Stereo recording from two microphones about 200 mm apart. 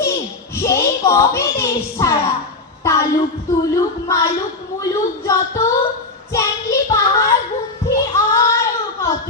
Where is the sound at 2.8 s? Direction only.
15° left (ahead or behind).